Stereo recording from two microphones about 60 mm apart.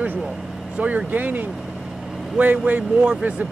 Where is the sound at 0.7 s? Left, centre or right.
Right.